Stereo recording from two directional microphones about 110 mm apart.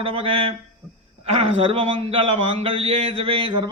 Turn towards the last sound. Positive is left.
turn(degrees=-45)  # may be behind; listen again after turning